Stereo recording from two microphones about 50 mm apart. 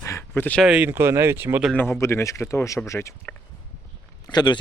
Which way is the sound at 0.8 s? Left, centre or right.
Right.